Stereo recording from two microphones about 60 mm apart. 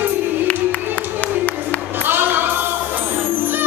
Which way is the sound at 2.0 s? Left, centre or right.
Right.